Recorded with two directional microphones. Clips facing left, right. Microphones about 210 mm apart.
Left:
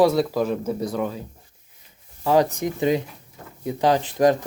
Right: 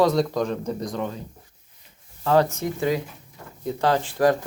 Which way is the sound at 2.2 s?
15° left (ahead or behind).